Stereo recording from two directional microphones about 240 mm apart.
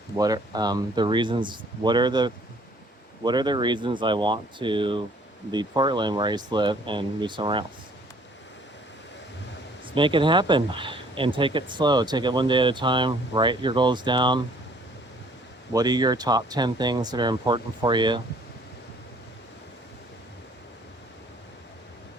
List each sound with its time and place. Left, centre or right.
0.2 s speech: centre
9.8 s speech: right
15.7 s speech: centre